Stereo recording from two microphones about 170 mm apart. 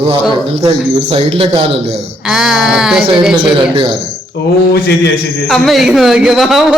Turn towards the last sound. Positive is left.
turn(degrees=0)  # may be behind; listen again after turning